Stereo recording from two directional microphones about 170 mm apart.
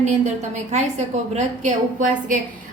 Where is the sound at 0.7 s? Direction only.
40° right (ahead or behind).